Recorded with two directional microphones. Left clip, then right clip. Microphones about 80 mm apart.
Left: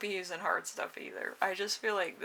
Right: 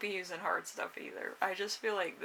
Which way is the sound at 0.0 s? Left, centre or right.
Left.